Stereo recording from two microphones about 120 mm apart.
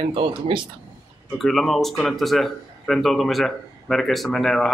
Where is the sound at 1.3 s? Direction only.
Centre (ahead or behind).